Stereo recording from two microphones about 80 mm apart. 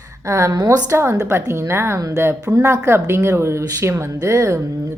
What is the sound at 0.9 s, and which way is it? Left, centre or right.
Speech, right.